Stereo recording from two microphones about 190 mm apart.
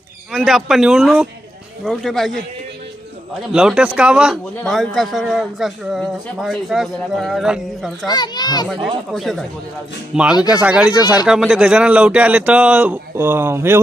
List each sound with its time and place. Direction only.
0.3 s a man's voice: centre (ahead or behind)
3.5 s a man's voice: 5° right (ahead or behind)
8.0 s a child's voice: 20° left (ahead or behind)
8.6 s a man's voice: centre (ahead or behind)